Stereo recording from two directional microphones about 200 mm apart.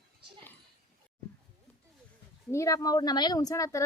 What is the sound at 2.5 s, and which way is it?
A woman's voice, 15° left (ahead or behind).